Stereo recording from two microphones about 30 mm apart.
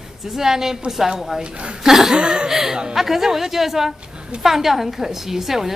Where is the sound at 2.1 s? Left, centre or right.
Right.